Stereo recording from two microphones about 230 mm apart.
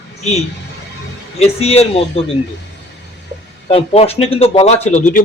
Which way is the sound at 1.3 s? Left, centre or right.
Left.